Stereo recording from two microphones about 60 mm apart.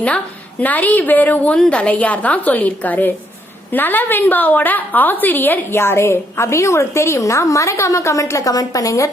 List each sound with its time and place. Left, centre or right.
0.6 s a woman's voice: left